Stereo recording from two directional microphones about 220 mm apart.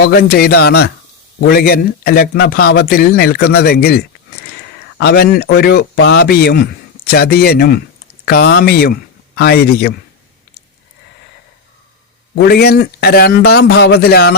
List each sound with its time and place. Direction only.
0.0 s speech: 45° left (ahead or behind)
12.3 s speech: 45° left (ahead or behind)